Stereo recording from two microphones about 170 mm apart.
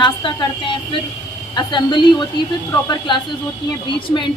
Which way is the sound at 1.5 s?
25° left (ahead or behind).